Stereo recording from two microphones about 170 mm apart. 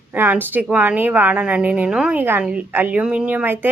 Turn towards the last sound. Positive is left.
turn(degrees=-10)  # may be behind; listen again after turning